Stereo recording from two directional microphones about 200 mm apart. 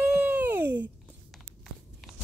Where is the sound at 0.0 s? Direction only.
5° right (ahead or behind).